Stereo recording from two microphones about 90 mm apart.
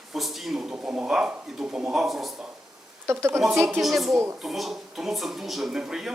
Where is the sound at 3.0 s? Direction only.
30° right (ahead or behind).